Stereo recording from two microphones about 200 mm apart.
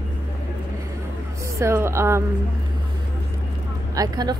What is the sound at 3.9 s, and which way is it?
Speech, 20° right (ahead or behind).